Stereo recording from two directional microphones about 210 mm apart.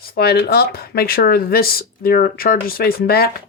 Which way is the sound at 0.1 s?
45° left (ahead or behind).